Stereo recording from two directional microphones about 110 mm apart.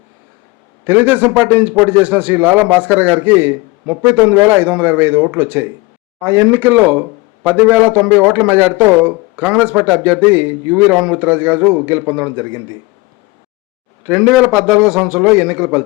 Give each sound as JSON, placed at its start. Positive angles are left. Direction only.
{"t": 0.9, "sound": "a man's voice", "side_deg": -15}
{"t": 10.9, "sound": "a man's voice", "side_deg": -5}
{"t": 11.2, "sound": "a man's voice", "side_deg": -15}
{"t": 14.2, "sound": "a man's voice", "side_deg": 0}